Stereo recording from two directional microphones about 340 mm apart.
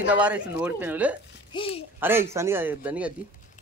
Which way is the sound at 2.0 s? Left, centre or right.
Centre.